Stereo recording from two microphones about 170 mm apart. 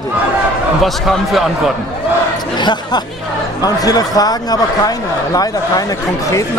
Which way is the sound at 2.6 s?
25° left (ahead or behind).